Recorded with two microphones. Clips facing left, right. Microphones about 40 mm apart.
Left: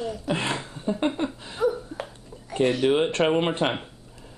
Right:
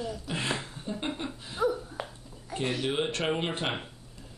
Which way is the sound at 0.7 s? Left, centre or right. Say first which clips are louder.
Left 9 dB; centre.